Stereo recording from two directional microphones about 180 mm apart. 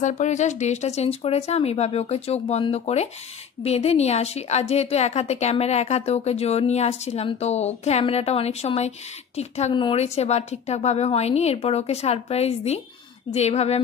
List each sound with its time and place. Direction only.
0.0 s a woman's voice: 40° left (ahead or behind)